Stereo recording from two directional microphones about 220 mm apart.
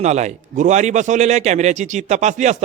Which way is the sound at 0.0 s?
30° right (ahead or behind).